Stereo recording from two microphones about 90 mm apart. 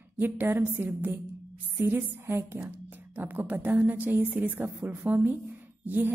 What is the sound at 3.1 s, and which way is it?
A woman's voice, 20° right (ahead or behind).